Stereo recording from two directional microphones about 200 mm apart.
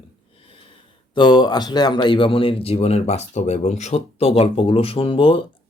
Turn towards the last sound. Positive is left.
turn(degrees=25)  # may be behind; listen again after turning